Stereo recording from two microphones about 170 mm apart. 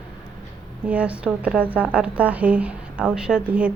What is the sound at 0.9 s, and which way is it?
A woman's voice, 5° right (ahead or behind).